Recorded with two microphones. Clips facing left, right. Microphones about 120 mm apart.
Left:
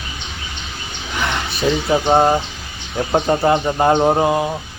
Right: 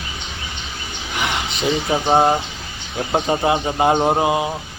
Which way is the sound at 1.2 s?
15° right (ahead or behind).